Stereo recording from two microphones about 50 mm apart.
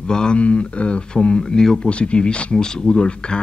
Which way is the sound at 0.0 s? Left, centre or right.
Centre.